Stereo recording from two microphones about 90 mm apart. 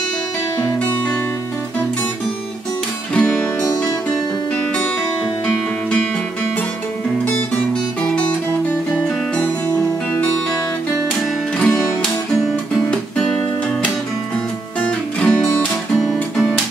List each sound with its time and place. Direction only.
3.2 s music: 10° left (ahead or behind)
11.6 s music: 5° left (ahead or behind)
14.8 s music: 15° left (ahead or behind)